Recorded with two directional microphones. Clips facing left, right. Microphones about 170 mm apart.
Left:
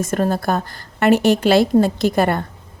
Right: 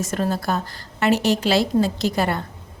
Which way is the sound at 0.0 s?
50° left (ahead or behind).